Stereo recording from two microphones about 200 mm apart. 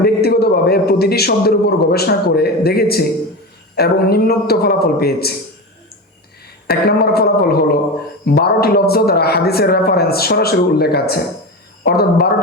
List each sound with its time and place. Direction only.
0.0 s a man's voice: 55° left (ahead or behind)
6.7 s a man's voice: 50° left (ahead or behind)